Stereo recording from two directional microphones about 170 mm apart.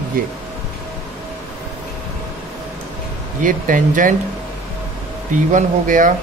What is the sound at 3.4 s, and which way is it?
Speech, 50° right (ahead or behind).